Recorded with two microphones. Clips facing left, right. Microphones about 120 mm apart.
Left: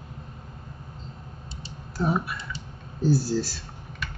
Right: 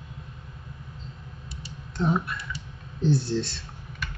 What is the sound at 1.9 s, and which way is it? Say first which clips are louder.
Speech: even; 5° left (ahead or behind).